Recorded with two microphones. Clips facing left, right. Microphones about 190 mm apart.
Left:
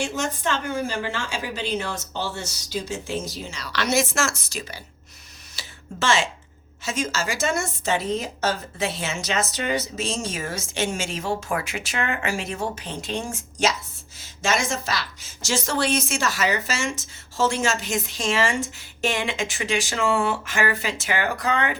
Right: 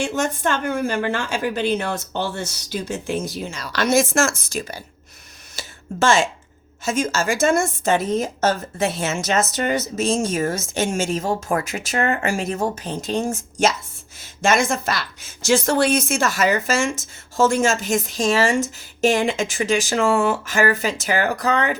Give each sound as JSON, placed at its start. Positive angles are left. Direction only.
{"t": 0.0, "sound": "a woman's voice", "side_deg": -50}
{"t": 5.5, "sound": "a sound", "side_deg": -45}
{"t": 6.8, "sound": "a woman's voice", "side_deg": -50}